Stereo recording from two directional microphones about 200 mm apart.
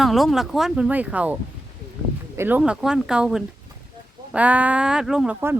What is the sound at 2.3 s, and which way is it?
Speech, 10° right (ahead or behind).